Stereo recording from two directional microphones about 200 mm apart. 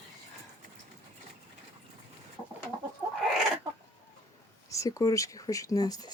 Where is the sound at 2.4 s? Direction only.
5° left (ahead or behind).